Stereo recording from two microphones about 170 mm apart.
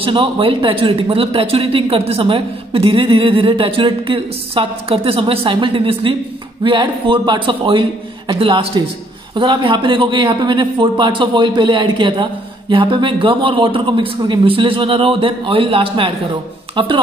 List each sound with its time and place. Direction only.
0.0 s speech: 30° right (ahead or behind)